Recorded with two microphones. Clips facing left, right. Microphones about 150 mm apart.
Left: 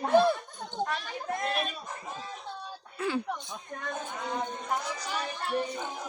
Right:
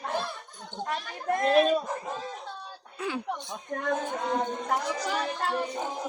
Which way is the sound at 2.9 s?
15° right (ahead or behind).